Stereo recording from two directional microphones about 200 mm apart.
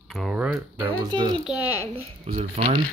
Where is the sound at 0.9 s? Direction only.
25° right (ahead or behind).